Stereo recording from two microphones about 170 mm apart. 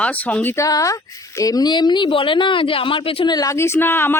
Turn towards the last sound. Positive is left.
turn(degrees=15)  # may be behind; listen again after turning